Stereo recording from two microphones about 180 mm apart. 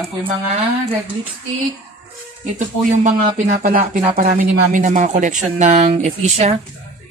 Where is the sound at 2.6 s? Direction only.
45° right (ahead or behind).